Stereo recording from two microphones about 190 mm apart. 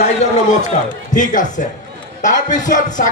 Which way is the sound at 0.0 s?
40° left (ahead or behind).